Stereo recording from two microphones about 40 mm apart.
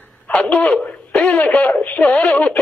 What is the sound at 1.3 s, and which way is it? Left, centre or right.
Speech, left.